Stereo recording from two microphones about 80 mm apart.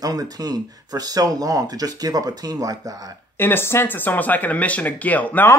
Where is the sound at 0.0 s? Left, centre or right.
Right.